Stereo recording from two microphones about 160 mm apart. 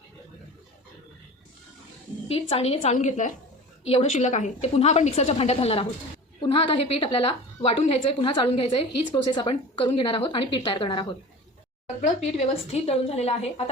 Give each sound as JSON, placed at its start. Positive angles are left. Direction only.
{"t": 2.2, "sound": "a woman's voice", "side_deg": 40}
{"t": 12.0, "sound": "a woman's voice", "side_deg": 45}